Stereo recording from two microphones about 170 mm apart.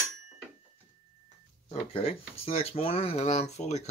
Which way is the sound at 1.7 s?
35° left (ahead or behind).